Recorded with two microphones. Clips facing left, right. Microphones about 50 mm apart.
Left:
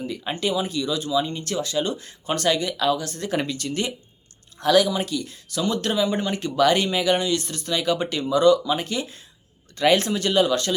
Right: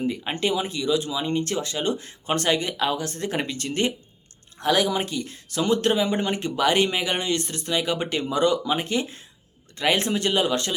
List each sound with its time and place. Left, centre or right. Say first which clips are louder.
0.1 s speech: even; right